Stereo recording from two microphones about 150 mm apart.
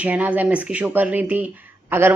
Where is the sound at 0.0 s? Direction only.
10° right (ahead or behind).